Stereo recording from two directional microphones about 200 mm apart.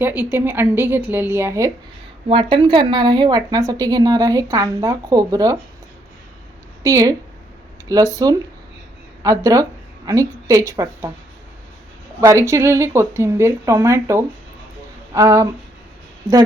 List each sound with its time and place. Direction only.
0.0 s speech: 10° right (ahead or behind)
2.2 s speech: 25° right (ahead or behind)
6.8 s speech: 15° right (ahead or behind)
12.2 s speech: 15° right (ahead or behind)